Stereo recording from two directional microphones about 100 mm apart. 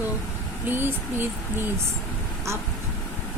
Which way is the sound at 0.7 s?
20° right (ahead or behind).